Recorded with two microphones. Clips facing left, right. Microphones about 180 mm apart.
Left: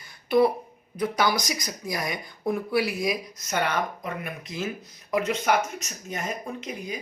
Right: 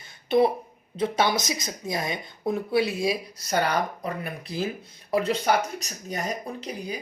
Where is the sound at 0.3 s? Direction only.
25° right (ahead or behind).